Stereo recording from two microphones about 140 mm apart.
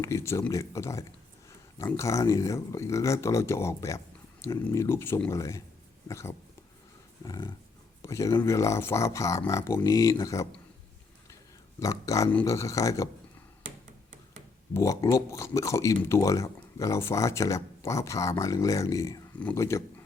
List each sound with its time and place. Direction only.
0.0 s speech: 20° left (ahead or behind)
7.3 s dog: 30° left (ahead or behind)
8.0 s speech: 20° left (ahead or behind)
11.8 s speech: 25° left (ahead or behind)
14.7 s speech: 20° left (ahead or behind)